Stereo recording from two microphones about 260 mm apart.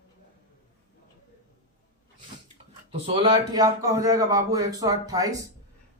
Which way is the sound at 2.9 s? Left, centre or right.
Right.